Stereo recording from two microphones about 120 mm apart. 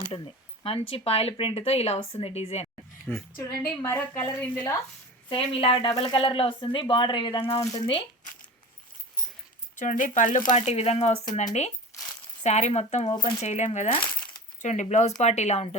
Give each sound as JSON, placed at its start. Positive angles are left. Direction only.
{"t": 0.6, "sound": "speech", "side_deg": 50}
{"t": 3.1, "sound": "a woman's voice", "side_deg": 20}
{"t": 5.3, "sound": "speech", "side_deg": 50}
{"t": 7.6, "sound": "speech", "side_deg": 30}
{"t": 9.7, "sound": "speech", "side_deg": 90}
{"t": 10.5, "sound": "speech", "side_deg": 65}
{"t": 13.7, "sound": "speech", "side_deg": 60}
{"t": 14.6, "sound": "speech", "side_deg": 80}